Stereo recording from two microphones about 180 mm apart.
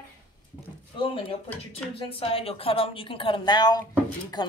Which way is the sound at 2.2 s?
30° left (ahead or behind).